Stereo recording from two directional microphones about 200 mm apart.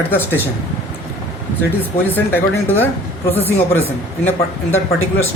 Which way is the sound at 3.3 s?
30° left (ahead or behind).